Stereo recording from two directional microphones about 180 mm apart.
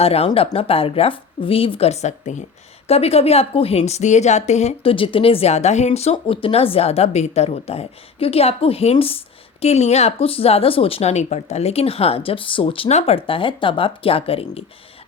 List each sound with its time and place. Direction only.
0.0 s speech: 35° left (ahead or behind)